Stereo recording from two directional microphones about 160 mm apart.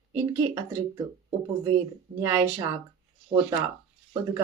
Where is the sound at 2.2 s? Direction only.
20° right (ahead or behind).